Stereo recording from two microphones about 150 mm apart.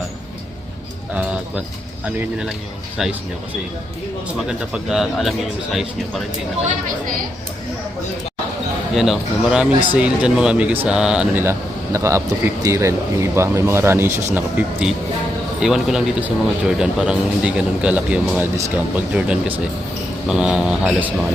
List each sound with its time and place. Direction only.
3.0 s speech: centre (ahead or behind)
4.4 s speech: 5° right (ahead or behind)
9.0 s speech: 5° right (ahead or behind)
11.4 s speech: 20° right (ahead or behind)